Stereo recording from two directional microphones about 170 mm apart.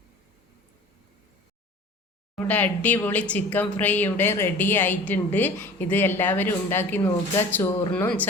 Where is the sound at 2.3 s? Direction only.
10° left (ahead or behind).